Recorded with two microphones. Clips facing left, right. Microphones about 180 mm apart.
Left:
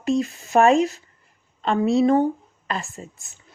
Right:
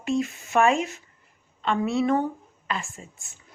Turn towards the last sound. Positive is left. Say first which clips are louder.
# left 6 dB
turn(degrees=35)  # may be behind; listen again after turning